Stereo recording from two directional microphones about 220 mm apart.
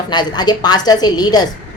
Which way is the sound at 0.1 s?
20° left (ahead or behind).